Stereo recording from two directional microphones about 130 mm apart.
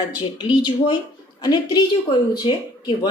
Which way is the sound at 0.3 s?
40° left (ahead or behind).